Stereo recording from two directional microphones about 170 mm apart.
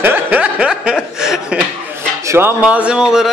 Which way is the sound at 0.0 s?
10° right (ahead or behind).